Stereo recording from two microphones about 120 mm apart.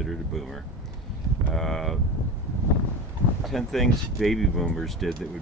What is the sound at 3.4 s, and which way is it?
Speech, centre (ahead or behind).